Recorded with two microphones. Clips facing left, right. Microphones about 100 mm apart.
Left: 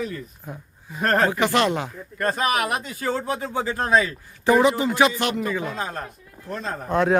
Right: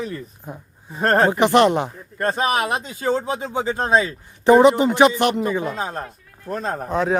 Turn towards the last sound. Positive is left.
turn(degrees=0)  # may be behind; listen again after turning